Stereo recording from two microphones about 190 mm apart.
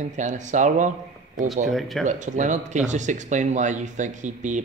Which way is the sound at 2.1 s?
40° right (ahead or behind).